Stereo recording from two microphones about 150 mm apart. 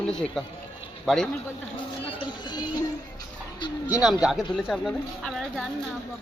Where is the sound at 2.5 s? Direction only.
30° left (ahead or behind).